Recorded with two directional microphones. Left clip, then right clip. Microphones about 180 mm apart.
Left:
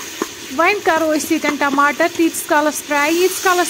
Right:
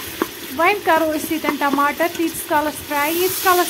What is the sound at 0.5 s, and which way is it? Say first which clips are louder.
Speech: left 1 dB; 20° left (ahead or behind).